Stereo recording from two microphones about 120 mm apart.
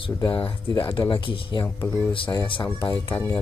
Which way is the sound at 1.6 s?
15° left (ahead or behind).